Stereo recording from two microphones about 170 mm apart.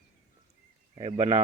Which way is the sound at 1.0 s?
40° right (ahead or behind).